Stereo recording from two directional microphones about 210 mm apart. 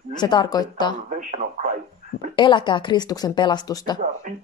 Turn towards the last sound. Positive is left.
turn(degrees=20)  # may be behind; listen again after turning